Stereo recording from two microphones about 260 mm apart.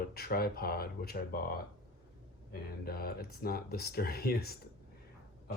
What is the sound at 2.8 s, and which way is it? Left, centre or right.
Speech, left.